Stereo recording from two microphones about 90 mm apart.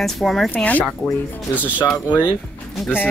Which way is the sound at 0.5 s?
15° left (ahead or behind).